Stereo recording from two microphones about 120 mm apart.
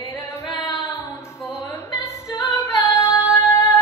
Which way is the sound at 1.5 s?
25° left (ahead or behind).